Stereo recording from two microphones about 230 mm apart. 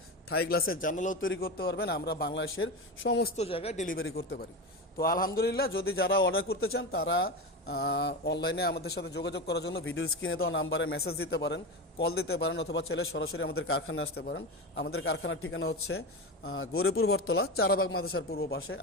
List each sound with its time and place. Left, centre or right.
0.3 s a man's voice: left
3.3 s speech: left
4.0 s a man's voice: left
4.9 s a man's voice: left
11.2 s speech: left
13.0 s a man's voice: left
14.2 s speech: left
14.9 s a man's voice: left
18.3 s speech: left